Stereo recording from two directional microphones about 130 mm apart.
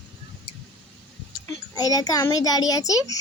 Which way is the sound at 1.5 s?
30° left (ahead or behind).